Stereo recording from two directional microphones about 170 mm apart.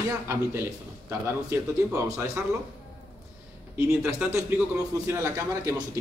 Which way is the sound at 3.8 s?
15° right (ahead or behind).